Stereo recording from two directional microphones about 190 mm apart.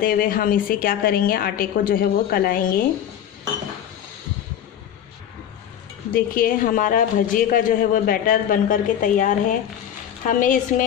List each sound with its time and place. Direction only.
0.0 s a woman's voice: 50° left (ahead or behind)
6.1 s a woman's voice: 50° left (ahead or behind)